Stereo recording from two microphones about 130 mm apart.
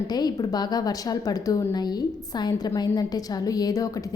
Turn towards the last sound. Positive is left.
turn(degrees=25)  # may be behind; listen again after turning